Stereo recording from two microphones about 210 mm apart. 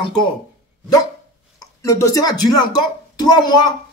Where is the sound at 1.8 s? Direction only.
15° left (ahead or behind).